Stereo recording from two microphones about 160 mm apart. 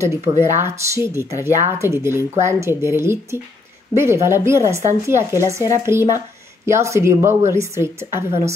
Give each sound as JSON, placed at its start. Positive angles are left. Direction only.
{"t": 0.4, "sound": "speech", "side_deg": -15}